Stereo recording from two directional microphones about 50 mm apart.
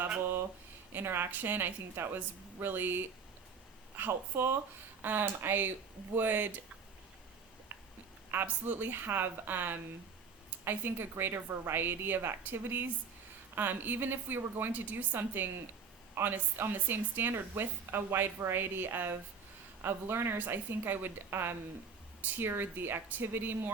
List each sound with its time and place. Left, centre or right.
0.9 s speech: right
7.7 s a sound: right
8.3 s a woman's voice: right